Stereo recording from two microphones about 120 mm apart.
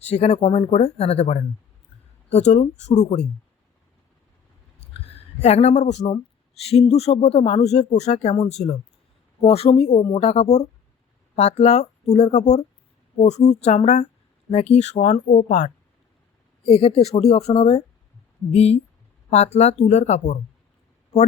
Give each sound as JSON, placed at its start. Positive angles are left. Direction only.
{"t": 0.1, "sound": "speech", "side_deg": 60}
{"t": 4.9, "sound": "speech", "side_deg": 55}
{"t": 6.6, "sound": "speech", "side_deg": 55}
{"t": 16.6, "sound": "speech", "side_deg": 60}